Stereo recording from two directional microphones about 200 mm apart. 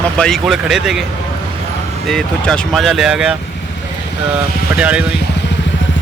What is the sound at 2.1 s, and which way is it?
Speech, 5° left (ahead or behind).